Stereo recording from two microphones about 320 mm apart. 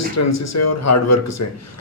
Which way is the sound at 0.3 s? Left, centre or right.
Left.